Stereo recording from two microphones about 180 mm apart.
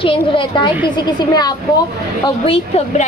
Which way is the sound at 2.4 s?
35° left (ahead or behind).